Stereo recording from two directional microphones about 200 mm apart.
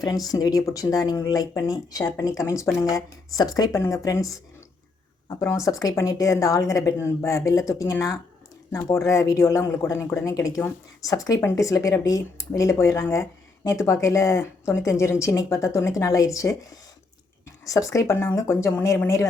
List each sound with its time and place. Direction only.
0.0 s speech: 20° left (ahead or behind)
5.3 s speech: 15° left (ahead or behind)
17.7 s speech: 15° left (ahead or behind)